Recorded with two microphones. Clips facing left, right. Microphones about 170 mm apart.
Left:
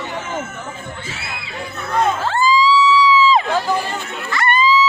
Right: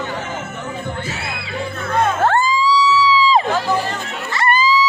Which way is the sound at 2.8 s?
35° right (ahead or behind).